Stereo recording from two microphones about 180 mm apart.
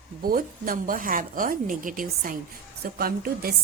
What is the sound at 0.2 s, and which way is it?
A woman's voice, 55° right (ahead or behind).